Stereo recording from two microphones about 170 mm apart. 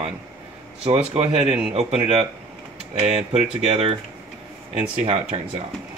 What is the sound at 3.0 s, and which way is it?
Speech, 35° right (ahead or behind).